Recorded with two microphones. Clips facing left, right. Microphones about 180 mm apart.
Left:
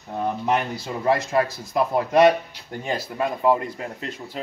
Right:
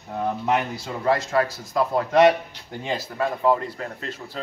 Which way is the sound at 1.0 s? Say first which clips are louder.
Even; 20° left (ahead or behind).